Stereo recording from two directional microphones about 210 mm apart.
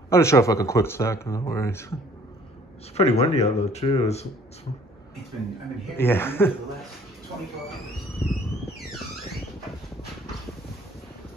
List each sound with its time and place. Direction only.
0.1 s speech: 15° left (ahead or behind)
3.0 s speech: 30° left (ahead or behind)
5.9 s speech: 10° left (ahead or behind)